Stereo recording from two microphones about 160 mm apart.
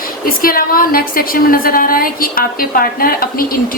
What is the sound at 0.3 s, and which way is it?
A woman's voice, 65° left (ahead or behind).